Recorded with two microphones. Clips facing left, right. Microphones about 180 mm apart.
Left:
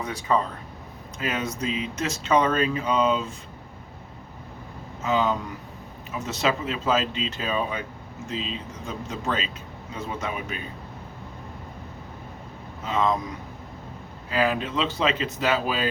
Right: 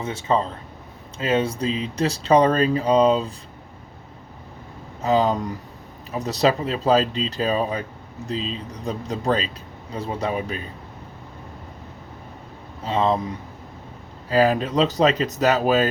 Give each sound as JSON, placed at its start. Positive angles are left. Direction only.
{"t": 0.0, "sound": "speech", "side_deg": -25}
{"t": 5.0, "sound": "speech", "side_deg": -35}
{"t": 12.8, "sound": "speech", "side_deg": -30}
{"t": 14.3, "sound": "speech", "side_deg": -40}